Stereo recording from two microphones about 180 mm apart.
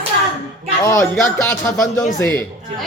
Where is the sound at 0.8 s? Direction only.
15° left (ahead or behind).